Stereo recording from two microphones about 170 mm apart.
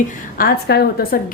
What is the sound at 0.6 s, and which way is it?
Speech, 65° left (ahead or behind).